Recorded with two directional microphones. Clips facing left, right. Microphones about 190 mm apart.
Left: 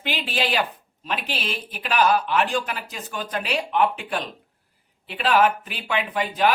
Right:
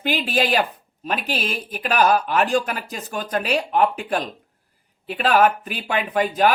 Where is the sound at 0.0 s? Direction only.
45° right (ahead or behind).